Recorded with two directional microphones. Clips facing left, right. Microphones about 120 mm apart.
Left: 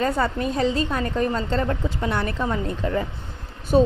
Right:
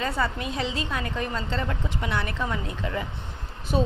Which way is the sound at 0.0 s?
40° left (ahead or behind).